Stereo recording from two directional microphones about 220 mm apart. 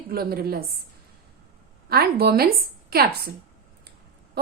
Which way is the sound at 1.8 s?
45° right (ahead or behind).